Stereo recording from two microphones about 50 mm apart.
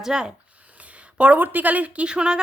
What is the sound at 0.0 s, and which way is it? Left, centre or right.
Speech, centre.